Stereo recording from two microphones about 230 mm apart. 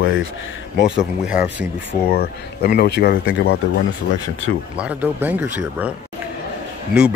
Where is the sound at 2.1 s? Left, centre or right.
Left.